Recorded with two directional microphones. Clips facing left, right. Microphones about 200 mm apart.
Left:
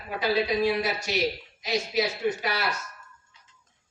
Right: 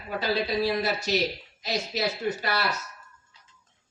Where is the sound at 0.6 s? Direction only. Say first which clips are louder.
Even; 40° right (ahead or behind).